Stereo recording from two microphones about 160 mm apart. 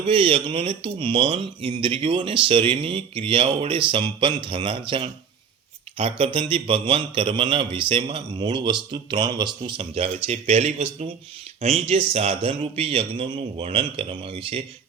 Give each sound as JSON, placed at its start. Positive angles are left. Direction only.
{"t": 0.0, "sound": "a man's voice", "side_deg": -35}